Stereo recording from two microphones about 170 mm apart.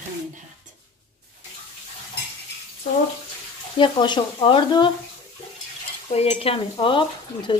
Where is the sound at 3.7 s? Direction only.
30° left (ahead or behind).